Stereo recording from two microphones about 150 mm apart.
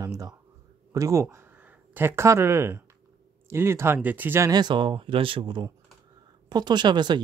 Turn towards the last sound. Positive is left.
turn(degrees=-30)  # may be behind; listen again after turning